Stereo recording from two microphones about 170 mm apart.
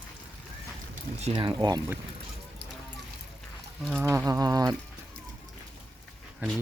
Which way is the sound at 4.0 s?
15° right (ahead or behind).